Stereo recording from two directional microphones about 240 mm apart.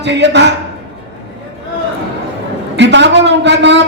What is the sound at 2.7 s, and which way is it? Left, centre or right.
A man's voice, right.